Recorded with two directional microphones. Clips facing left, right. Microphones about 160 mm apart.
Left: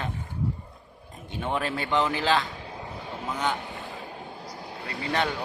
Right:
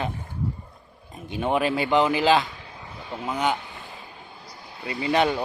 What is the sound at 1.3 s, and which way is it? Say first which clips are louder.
Speech: right 6 dB; 10° right (ahead or behind).